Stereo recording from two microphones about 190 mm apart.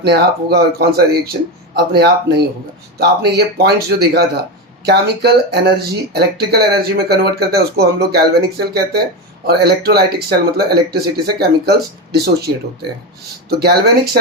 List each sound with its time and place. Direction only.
0.0 s speech: 60° right (ahead or behind)
13.6 s speech: 55° right (ahead or behind)